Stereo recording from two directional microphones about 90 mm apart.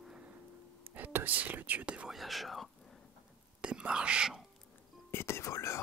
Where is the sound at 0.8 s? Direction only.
25° right (ahead or behind).